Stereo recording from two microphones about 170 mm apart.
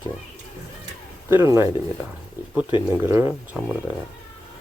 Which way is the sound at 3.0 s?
15° right (ahead or behind).